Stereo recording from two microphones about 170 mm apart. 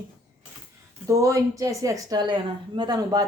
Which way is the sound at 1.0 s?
20° right (ahead or behind).